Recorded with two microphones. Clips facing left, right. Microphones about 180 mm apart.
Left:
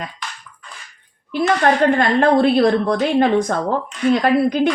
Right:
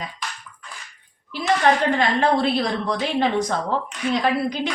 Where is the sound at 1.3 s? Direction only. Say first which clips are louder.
Left 3 dB; 55° left (ahead or behind).